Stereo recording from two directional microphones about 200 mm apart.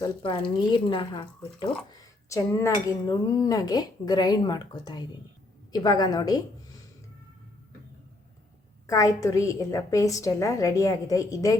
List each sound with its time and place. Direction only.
0.0 s speech: 25° left (ahead or behind)
8.9 s a woman's voice: 15° left (ahead or behind)